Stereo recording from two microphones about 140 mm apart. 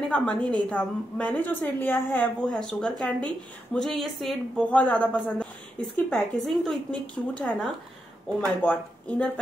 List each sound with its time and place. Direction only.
0.1 s a woman's voice: 5° left (ahead or behind)